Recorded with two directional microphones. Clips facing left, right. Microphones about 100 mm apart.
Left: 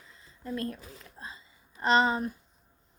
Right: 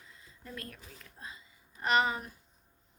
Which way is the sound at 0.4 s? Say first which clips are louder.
Left 11 dB; 30° left (ahead or behind).